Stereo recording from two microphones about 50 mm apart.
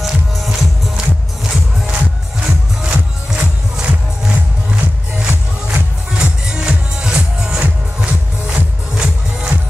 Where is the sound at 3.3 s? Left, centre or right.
Centre.